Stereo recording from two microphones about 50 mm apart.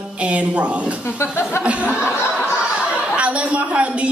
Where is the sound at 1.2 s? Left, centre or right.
Left.